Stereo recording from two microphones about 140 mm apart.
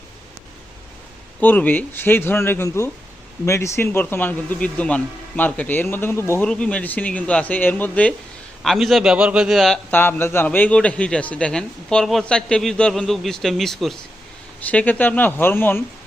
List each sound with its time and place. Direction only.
1.4 s speech: 10° left (ahead or behind)
6.5 s a man's voice: 10° left (ahead or behind)
9.9 s a man's voice: 15° left (ahead or behind)